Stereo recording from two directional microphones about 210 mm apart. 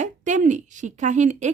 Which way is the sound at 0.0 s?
35° right (ahead or behind).